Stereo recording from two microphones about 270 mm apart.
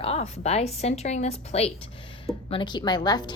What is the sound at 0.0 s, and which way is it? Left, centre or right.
A woman's voice, left.